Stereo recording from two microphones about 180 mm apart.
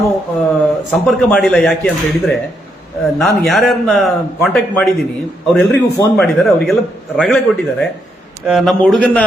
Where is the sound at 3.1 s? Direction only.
Centre (ahead or behind).